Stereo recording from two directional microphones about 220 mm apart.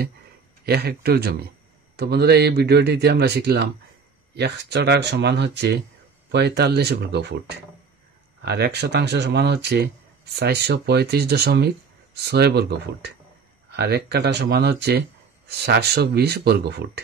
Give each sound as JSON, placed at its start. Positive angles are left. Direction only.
{"t": 0.7, "sound": "speech", "side_deg": -45}